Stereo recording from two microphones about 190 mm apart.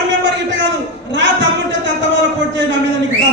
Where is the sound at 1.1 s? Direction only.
70° right (ahead or behind).